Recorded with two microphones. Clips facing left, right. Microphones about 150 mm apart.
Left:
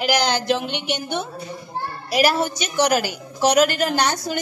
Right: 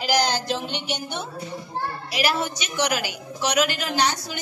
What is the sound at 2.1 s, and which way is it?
A woman's voice, 40° left (ahead or behind).